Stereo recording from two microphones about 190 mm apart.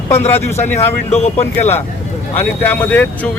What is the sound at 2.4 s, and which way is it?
Speech, 10° left (ahead or behind).